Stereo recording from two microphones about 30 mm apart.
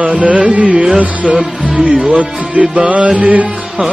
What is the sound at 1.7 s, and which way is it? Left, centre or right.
Music, right.